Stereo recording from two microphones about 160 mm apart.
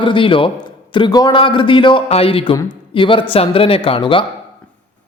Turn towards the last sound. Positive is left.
turn(degrees=30)  # may be behind; listen again after turning